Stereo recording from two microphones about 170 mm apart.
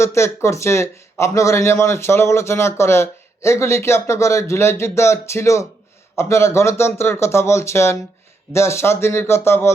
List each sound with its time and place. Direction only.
0.0 s speech: 15° left (ahead or behind)